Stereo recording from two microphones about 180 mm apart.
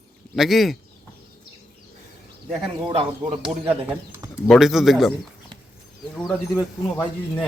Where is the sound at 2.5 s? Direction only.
30° right (ahead or behind).